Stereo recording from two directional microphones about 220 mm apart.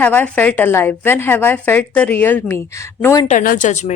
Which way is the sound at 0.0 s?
10° left (ahead or behind).